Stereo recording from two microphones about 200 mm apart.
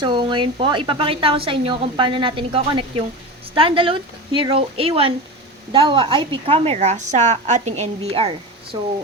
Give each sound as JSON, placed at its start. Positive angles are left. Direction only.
{"t": 0.0, "sound": "speech", "side_deg": -25}